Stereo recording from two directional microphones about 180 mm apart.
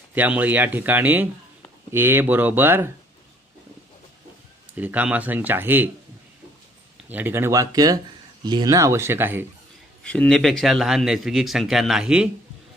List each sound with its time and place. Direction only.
0.1 s speech: 10° right (ahead or behind)
4.7 s speech: 10° right (ahead or behind)
7.1 s speech: 10° right (ahead or behind)
10.0 s speech: 5° left (ahead or behind)